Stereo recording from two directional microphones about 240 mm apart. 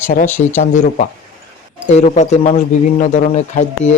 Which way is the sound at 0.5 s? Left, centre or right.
Left.